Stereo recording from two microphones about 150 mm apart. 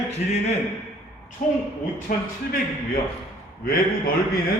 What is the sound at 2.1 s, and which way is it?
Speech, 65° left (ahead or behind).